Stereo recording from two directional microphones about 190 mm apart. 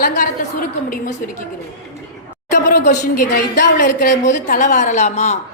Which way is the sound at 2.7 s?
45° left (ahead or behind).